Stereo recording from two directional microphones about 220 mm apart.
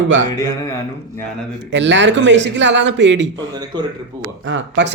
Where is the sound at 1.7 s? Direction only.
55° right (ahead or behind).